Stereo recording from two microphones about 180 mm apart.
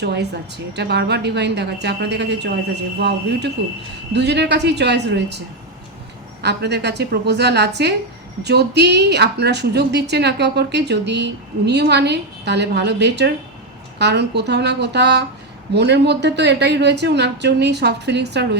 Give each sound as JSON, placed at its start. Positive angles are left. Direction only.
{"t": 0.0, "sound": "a woman's voice", "side_deg": -70}
{"t": 6.4, "sound": "a woman's voice", "side_deg": -70}